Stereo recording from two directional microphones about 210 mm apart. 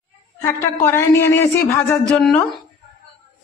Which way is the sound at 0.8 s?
10° left (ahead or behind).